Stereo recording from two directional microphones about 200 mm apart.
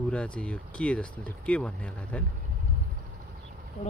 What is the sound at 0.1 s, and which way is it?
Speech, 5° left (ahead or behind).